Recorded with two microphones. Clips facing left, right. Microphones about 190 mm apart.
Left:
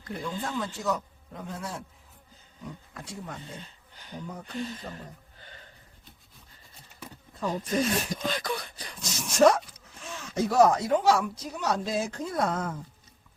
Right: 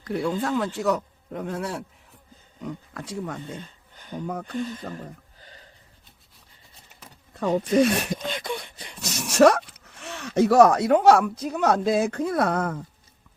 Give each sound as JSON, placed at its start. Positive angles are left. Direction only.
{"t": 0.4, "sound": "speech", "side_deg": -65}
{"t": 2.6, "sound": "speech", "side_deg": -60}
{"t": 4.3, "sound": "speech", "side_deg": -65}
{"t": 4.5, "sound": "speech", "side_deg": -45}
{"t": 7.3, "sound": "speech", "side_deg": -70}
{"t": 8.1, "sound": "a sound", "side_deg": -25}
{"t": 9.0, "sound": "speech", "side_deg": -70}